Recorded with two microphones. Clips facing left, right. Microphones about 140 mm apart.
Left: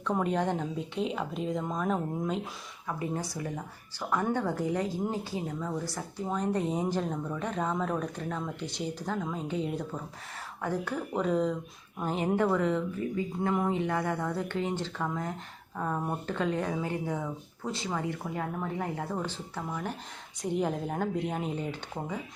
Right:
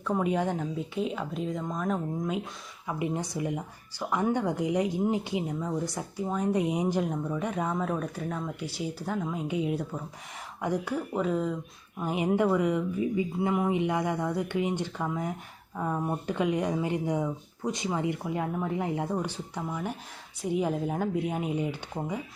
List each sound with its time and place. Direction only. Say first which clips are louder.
0.0 s speech: right 1 dB; 10° right (ahead or behind)
11.1 s speech: left 2 dB; 5° right (ahead or behind)